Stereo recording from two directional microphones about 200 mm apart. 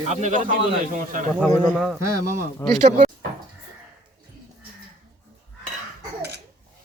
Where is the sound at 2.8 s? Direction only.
40° right (ahead or behind).